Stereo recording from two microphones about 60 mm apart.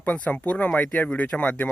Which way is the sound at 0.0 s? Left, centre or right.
Left.